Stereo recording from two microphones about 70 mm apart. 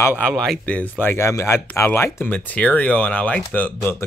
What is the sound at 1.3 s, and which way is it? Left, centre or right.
Speech, left.